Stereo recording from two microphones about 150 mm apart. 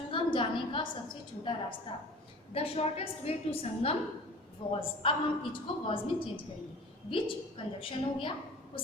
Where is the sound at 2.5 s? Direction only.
40° left (ahead or behind).